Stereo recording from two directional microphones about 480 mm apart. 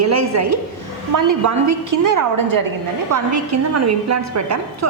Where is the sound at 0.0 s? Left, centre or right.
Right.